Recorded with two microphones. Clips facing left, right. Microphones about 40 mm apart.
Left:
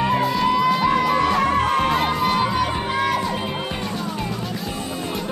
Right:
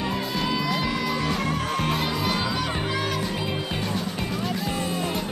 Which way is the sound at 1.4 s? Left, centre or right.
Left.